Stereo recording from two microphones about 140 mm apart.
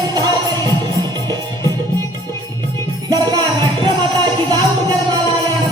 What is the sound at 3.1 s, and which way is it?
Music, 30° right (ahead or behind).